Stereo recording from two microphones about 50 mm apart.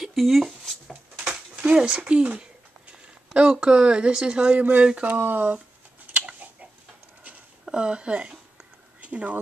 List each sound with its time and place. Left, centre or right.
0.0 s speech: centre
0.5 s a sound: centre
1.6 s speech: right
5.0 s speech: right
6.1 s chicken: right
7.6 s speech: centre
8.5 s a sound: right